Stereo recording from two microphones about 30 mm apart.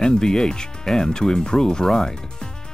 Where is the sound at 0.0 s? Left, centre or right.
Left.